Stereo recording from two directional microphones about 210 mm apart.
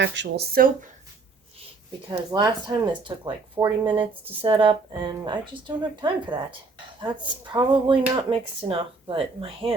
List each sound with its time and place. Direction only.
0.0 s speech: 55° right (ahead or behind)
2.0 s speech: 15° right (ahead or behind)